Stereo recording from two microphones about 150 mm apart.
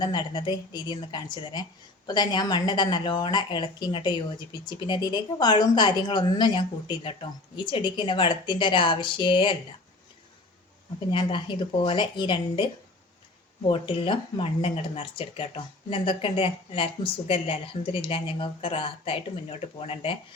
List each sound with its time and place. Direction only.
0.0 s speech: 30° left (ahead or behind)
11.1 s speech: 30° left (ahead or behind)
13.7 s speech: 35° left (ahead or behind)